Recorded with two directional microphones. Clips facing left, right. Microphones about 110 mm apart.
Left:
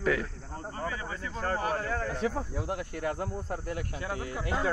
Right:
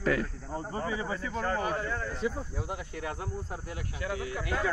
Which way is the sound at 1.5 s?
50° left (ahead or behind).